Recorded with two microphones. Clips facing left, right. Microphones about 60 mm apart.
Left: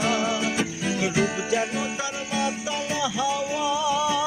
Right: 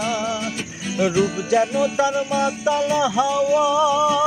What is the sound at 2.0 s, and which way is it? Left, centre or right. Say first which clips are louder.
Music: right 8 dB; right.